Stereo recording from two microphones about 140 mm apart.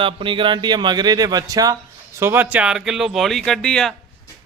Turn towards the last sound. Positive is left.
turn(degrees=5)  # may be behind; listen again after turning